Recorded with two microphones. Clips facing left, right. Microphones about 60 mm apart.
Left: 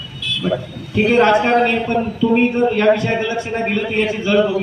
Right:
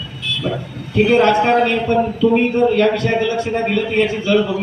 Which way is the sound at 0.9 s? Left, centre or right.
Left.